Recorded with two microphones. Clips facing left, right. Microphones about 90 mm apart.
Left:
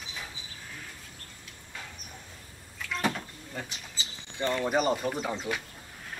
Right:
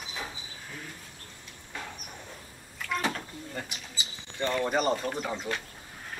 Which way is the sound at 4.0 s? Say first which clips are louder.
Right 1 dB; 15° right (ahead or behind).